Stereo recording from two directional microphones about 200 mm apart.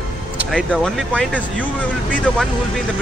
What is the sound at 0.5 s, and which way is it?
Speech, 5° left (ahead or behind).